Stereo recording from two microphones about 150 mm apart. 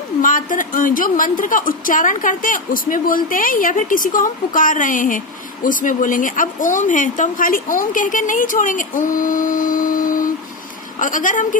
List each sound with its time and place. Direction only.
0.2 s speech: 60° left (ahead or behind)